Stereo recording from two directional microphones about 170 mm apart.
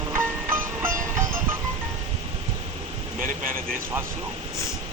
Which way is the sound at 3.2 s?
55° right (ahead or behind).